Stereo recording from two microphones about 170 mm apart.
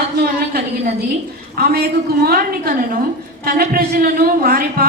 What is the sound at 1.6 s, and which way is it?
A woman's voice, 70° right (ahead or behind).